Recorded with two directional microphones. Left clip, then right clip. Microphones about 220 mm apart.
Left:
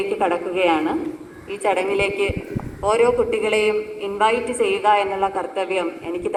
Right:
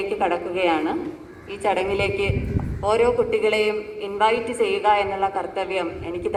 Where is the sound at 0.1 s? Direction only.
40° right (ahead or behind).